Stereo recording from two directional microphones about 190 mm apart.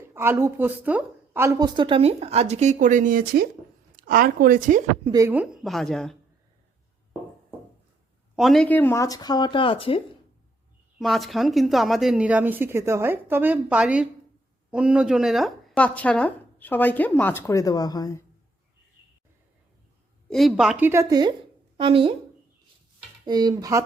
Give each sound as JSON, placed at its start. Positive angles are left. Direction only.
{"t": 0.1, "sound": "a woman's voice", "side_deg": -15}
{"t": 5.0, "sound": "a woman's voice", "side_deg": -15}
{"t": 8.4, "sound": "speech", "side_deg": 0}
{"t": 11.0, "sound": "speech", "side_deg": 0}
{"t": 20.3, "sound": "a woman's voice", "side_deg": 0}
{"t": 23.2, "sound": "a woman's voice", "side_deg": -20}